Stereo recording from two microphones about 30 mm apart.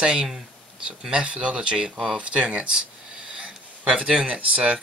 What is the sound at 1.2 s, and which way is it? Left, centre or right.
Speech, right.